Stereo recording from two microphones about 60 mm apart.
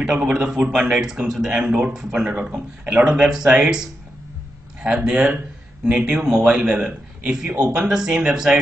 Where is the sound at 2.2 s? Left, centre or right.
Centre.